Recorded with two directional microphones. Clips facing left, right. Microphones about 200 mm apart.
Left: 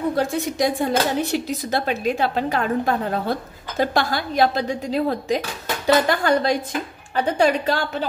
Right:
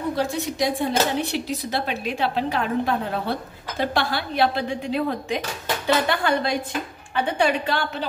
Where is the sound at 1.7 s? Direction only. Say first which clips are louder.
Left 7 dB; 45° left (ahead or behind).